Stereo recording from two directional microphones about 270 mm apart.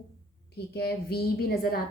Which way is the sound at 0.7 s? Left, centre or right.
Left.